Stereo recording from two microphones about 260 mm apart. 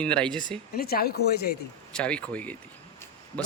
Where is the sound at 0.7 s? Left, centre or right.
Left.